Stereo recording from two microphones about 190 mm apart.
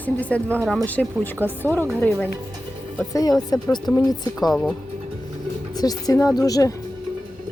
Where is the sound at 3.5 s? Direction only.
20° left (ahead or behind).